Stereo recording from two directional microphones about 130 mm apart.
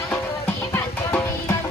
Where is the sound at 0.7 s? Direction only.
20° left (ahead or behind).